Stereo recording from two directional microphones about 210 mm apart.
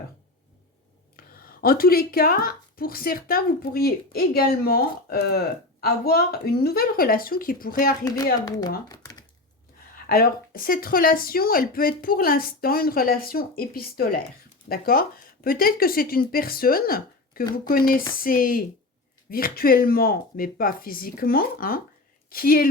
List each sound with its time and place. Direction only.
1.1 s speech: 45° left (ahead or behind)
8.0 s a woman's voice: 15° left (ahead or behind)
8.9 s computer keyboard: 15° left (ahead or behind)
10.1 s speech: 45° left (ahead or behind)